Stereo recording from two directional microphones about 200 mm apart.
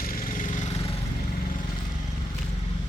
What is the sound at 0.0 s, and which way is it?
Vehicle, 45° left (ahead or behind).